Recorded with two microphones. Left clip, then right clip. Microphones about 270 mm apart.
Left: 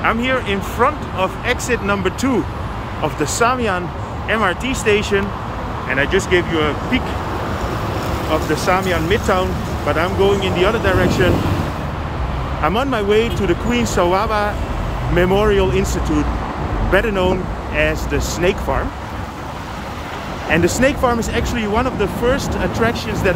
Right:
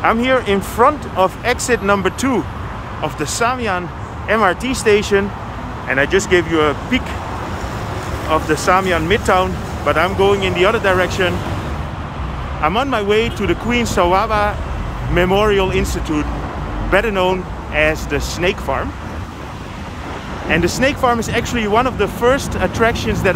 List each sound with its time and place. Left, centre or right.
0.0 s speech: centre
4.3 s speech: centre
8.5 s speech: centre
12.6 s speech: centre
20.4 s speech: centre